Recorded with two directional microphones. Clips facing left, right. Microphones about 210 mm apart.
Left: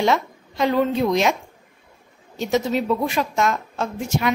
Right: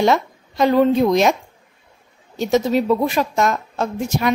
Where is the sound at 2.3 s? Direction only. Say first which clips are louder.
Right 4 dB; 40° right (ahead or behind).